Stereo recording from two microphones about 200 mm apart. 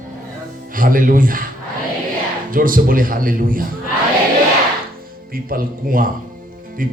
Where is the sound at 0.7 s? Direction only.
45° right (ahead or behind).